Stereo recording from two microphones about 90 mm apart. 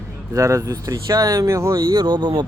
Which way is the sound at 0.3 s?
35° right (ahead or behind).